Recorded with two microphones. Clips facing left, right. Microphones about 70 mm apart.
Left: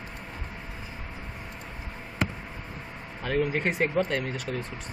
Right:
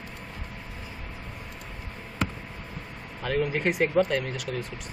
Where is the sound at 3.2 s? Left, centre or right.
Centre.